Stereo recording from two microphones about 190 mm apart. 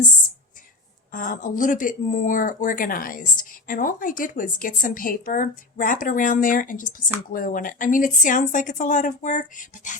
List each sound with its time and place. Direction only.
1.1 s speech: 45° left (ahead or behind)